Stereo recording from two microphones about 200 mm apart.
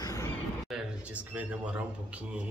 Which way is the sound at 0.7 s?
5° right (ahead or behind).